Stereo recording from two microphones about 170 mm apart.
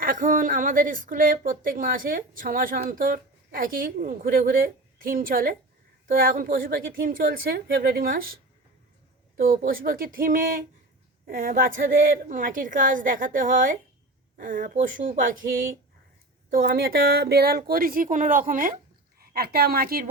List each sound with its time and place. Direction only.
0.0 s a woman's voice: 55° right (ahead or behind)
9.4 s a woman's voice: 60° right (ahead or behind)
16.5 s a woman's voice: 60° right (ahead or behind)